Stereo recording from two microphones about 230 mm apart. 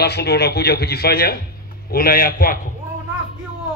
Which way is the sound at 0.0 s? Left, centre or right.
Left.